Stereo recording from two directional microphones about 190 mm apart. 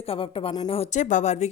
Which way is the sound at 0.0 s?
30° left (ahead or behind).